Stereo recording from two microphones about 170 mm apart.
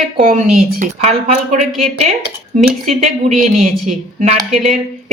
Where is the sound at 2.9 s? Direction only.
40° right (ahead or behind).